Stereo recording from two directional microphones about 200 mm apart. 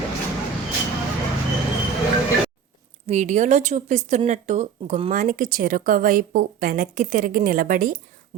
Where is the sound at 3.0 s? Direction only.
35° right (ahead or behind).